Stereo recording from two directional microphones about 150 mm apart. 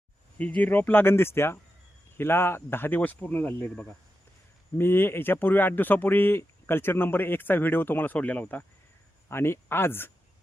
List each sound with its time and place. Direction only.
0.3 s a man's voice: 10° left (ahead or behind)